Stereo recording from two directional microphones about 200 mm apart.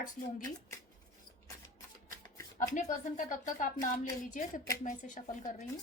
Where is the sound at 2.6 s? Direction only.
40° left (ahead or behind).